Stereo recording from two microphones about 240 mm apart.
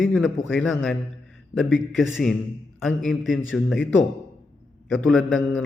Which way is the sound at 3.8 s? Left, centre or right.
Left.